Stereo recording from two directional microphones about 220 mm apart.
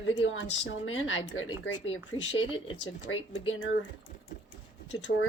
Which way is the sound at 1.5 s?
20° left (ahead or behind).